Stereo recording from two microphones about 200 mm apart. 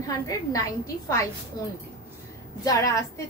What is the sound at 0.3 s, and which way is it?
Speech, 15° left (ahead or behind).